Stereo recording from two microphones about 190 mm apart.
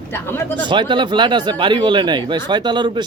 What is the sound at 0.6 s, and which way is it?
Speech, 25° right (ahead or behind).